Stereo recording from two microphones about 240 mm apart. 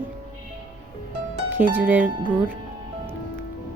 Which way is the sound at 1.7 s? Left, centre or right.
Centre.